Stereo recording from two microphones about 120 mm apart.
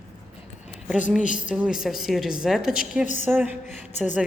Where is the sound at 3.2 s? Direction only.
15° right (ahead or behind).